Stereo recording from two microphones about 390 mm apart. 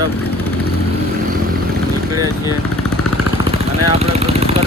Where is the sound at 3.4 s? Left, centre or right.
Centre.